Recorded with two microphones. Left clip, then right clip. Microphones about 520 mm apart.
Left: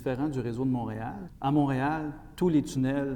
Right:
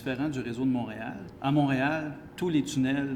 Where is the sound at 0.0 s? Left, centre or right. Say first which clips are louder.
Left 1 dB; left.